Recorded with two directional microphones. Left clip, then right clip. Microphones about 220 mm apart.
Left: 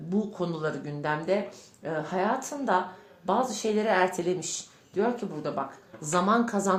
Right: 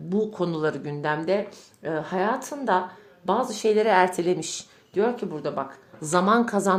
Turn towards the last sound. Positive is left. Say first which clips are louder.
# right 4 dB
turn(degrees=-35)  # may be behind; listen again after turning